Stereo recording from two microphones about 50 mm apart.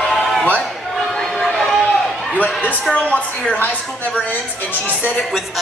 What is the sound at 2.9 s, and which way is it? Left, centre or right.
Speech, centre.